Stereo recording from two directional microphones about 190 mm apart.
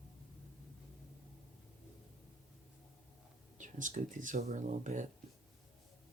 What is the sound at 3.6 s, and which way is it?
Speech, 40° right (ahead or behind).